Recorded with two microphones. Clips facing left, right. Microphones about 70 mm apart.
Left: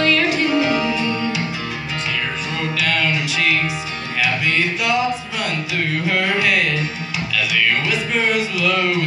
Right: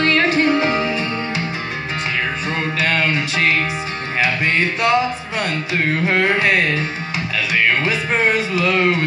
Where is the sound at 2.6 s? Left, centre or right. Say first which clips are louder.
Right 1 dB; right.